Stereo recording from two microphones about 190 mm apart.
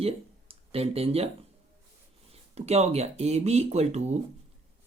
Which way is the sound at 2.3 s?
35° right (ahead or behind).